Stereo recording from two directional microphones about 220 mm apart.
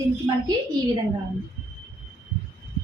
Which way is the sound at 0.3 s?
25° right (ahead or behind).